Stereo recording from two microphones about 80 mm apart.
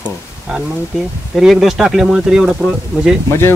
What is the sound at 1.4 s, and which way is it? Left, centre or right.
Speech, centre.